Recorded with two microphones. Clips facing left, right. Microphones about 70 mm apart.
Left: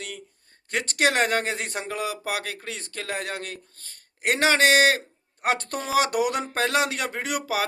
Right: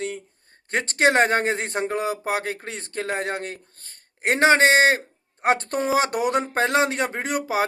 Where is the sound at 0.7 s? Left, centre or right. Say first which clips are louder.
Right 4 dB; right.